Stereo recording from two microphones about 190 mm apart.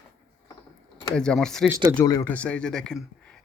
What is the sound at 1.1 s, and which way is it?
Speech, 5° left (ahead or behind).